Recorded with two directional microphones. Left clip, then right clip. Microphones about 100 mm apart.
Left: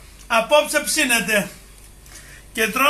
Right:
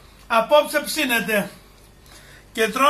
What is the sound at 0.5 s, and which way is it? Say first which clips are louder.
Speech: left 1 dB; 5° right (ahead or behind).